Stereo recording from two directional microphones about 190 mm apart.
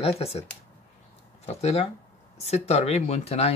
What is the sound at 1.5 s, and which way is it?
Speech, 35° left (ahead or behind).